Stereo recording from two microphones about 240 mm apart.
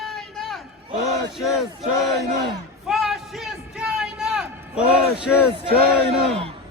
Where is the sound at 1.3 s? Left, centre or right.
Centre.